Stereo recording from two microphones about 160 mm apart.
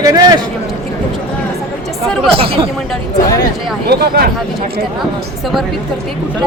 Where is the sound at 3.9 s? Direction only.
85° right.